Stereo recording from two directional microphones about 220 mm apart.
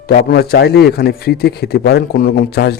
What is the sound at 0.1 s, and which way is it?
A man's voice, 45° left (ahead or behind).